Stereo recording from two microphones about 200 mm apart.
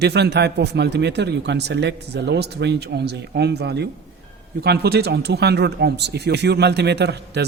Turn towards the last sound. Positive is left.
turn(degrees=-55)  # may be behind; listen again after turning